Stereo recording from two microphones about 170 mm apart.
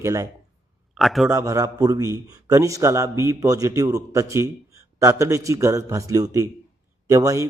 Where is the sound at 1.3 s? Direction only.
20° right (ahead or behind).